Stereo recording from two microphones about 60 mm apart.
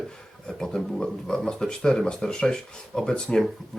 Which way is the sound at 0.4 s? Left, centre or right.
Centre.